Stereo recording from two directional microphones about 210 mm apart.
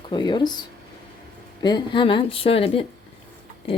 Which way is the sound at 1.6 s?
20° left (ahead or behind).